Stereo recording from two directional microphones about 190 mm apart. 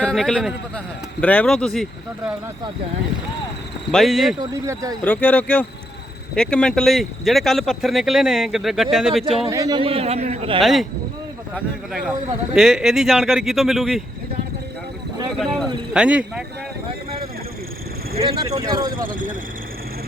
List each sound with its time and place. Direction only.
0.0 s speech: centre (ahead or behind)
3.9 s speech: centre (ahead or behind)
4.4 s speech: 15° right (ahead or behind)
5.0 s speech: 10° left (ahead or behind)
9.5 s a man's voice: 20° right (ahead or behind)
10.6 s speech: centre (ahead or behind)
15.4 s speech: centre (ahead or behind)
18.2 s a man's voice: 30° right (ahead or behind)
18.9 s speech: 45° right (ahead or behind)